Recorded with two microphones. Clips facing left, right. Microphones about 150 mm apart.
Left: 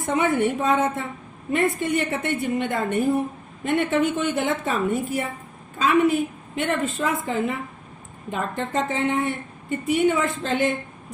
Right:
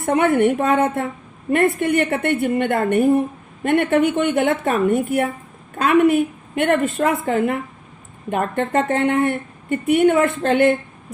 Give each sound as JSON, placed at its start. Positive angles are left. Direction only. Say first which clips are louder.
{"t": 0.0, "sound": "speech", "louder": "right 5 dB", "side_deg": -60}